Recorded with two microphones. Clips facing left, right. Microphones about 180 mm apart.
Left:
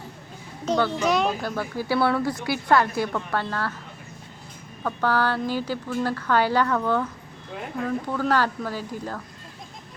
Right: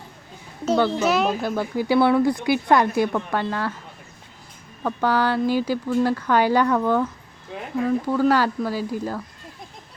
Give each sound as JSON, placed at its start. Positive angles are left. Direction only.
{"t": 0.6, "sound": "speech", "side_deg": -5}
{"t": 4.8, "sound": "speech", "side_deg": -15}